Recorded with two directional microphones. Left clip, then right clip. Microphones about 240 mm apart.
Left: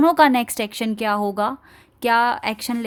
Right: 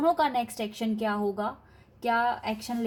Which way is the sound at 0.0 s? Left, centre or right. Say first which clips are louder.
Left 10 dB; left.